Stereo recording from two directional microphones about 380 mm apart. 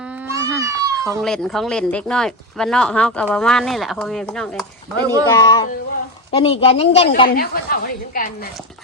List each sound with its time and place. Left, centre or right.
0.0 s a woman's voice: centre; by 8.4 s left